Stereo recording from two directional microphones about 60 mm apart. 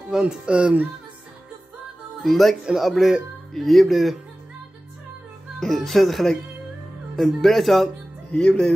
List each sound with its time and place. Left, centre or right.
0.1 s a child's voice: centre
2.2 s speech: centre
5.6 s speech: centre
8.3 s speech: centre